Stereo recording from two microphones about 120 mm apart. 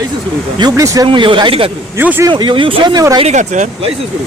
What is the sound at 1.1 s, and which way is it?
Speech, 45° right (ahead or behind).